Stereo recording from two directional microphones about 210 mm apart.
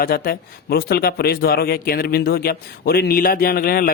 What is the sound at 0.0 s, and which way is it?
A man's voice, 45° left (ahead or behind).